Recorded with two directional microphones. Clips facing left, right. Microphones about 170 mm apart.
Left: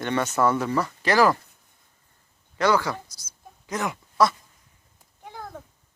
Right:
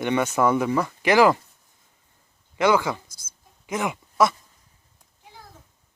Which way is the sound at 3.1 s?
50° right (ahead or behind).